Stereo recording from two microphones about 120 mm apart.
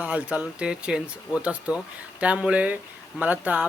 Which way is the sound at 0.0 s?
10° right (ahead or behind).